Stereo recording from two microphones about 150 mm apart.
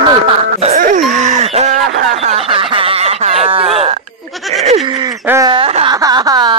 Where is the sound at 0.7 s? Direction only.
60° right (ahead or behind); by 5.1 s 30° right (ahead or behind).